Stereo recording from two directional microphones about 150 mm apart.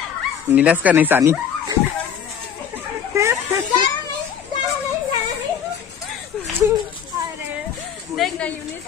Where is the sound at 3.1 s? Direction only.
20° right (ahead or behind).